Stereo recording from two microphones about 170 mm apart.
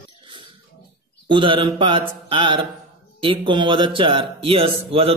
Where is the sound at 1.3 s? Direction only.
30° right (ahead or behind).